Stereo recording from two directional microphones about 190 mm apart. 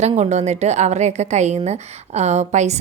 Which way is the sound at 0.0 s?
35° right (ahead or behind).